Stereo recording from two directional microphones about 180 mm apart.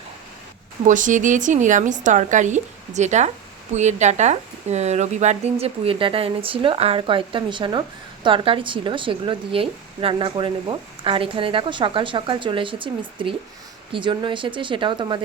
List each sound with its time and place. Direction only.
0.9 s a woman's voice: 45° right (ahead or behind); by 15.2 s 25° right (ahead or behind)